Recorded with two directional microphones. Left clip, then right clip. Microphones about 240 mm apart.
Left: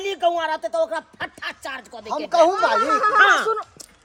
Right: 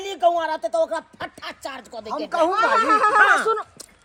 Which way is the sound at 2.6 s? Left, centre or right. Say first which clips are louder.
Even; left.